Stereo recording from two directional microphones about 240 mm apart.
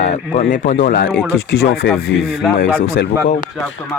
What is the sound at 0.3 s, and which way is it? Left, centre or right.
Speech, left.